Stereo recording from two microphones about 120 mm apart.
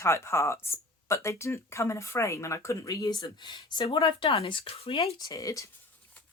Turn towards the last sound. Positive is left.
turn(degrees=25)  # may be behind; listen again after turning